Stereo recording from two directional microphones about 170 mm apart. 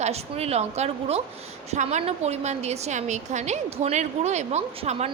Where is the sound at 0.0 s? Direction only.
40° right (ahead or behind).